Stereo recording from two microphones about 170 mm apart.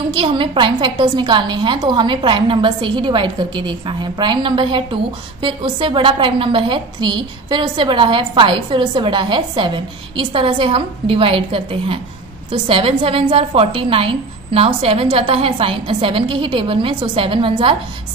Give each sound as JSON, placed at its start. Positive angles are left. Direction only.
{"t": 0.1, "sound": "a woman's voice", "side_deg": -30}